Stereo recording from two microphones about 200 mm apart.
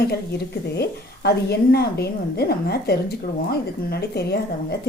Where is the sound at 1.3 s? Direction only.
55° left (ahead or behind).